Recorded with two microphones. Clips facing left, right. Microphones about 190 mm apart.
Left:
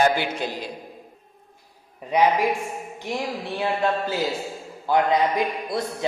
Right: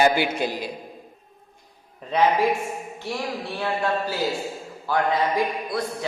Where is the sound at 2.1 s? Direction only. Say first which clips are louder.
Even; 15° left (ahead or behind).